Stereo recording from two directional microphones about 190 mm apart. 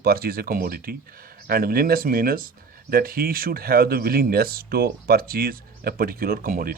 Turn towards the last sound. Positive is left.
turn(degrees=-50)  # may be behind; listen again after turning